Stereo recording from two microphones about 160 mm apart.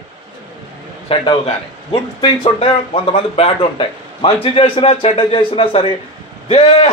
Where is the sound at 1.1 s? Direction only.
35° left (ahead or behind).